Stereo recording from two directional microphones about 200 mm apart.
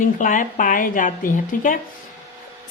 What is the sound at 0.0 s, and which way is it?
A woman's voice, 40° left (ahead or behind).